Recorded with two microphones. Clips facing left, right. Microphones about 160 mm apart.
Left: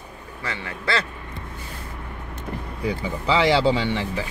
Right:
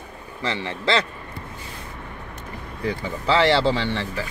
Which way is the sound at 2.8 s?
10° left (ahead or behind).